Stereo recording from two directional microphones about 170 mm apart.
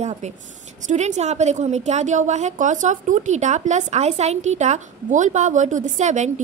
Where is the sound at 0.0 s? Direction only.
45° right (ahead or behind).